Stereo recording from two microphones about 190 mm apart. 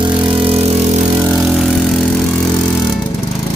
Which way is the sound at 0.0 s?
25° right (ahead or behind).